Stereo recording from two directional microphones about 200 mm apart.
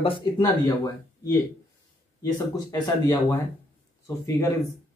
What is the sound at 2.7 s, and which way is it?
Speech, 20° left (ahead or behind).